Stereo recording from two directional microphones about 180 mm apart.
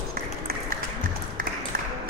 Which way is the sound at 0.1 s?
60° right (ahead or behind).